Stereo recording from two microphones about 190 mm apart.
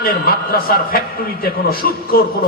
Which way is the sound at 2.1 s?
50° left (ahead or behind).